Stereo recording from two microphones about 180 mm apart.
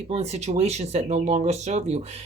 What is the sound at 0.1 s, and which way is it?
Speech, 35° right (ahead or behind).